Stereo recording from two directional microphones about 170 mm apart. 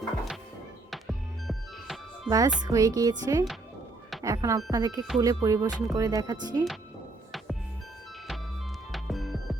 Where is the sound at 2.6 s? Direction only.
20° right (ahead or behind).